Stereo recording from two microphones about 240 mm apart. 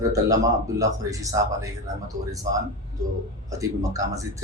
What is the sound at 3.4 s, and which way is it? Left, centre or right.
Speech, centre.